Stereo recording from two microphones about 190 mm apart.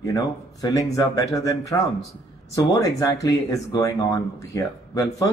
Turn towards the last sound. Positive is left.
turn(degrees=15)  # may be behind; listen again after turning